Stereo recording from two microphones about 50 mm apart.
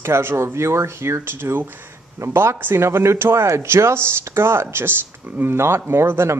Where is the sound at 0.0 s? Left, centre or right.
Right.